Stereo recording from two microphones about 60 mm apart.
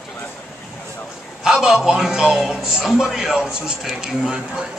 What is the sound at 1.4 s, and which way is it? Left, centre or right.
Speech, centre.